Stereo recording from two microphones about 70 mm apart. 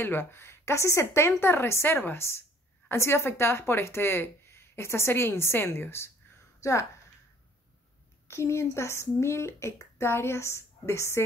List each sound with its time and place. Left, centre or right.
0.0 s a woman's voice: left
6.6 s speech: left
8.3 s a woman's voice: left